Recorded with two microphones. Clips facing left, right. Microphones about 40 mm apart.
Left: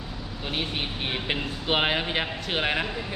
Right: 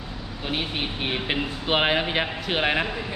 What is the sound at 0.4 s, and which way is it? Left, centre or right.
Speech, centre.